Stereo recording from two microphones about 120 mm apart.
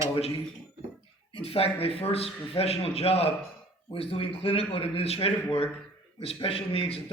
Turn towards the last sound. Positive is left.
turn(degrees=55)  # may be behind; listen again after turning